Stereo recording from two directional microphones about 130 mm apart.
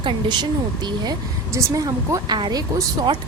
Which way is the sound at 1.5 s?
25° right (ahead or behind).